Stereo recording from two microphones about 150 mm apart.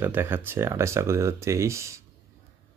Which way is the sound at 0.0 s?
15° right (ahead or behind).